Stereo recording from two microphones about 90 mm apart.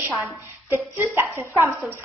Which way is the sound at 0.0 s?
25° right (ahead or behind).